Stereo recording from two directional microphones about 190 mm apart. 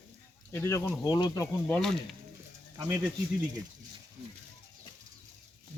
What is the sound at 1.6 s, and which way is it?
Speech, 5° left (ahead or behind).